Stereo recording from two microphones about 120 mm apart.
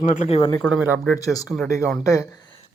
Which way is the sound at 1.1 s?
30° left (ahead or behind).